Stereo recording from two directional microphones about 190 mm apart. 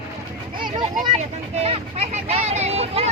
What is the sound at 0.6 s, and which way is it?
Speech, 25° right (ahead or behind).